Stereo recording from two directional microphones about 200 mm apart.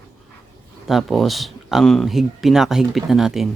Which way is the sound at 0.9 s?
Centre (ahead or behind).